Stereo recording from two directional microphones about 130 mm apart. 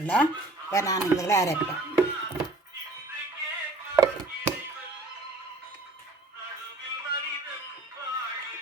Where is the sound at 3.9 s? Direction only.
25° right (ahead or behind).